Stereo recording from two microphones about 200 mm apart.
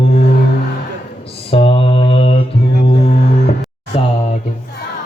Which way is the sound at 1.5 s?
30° left (ahead or behind).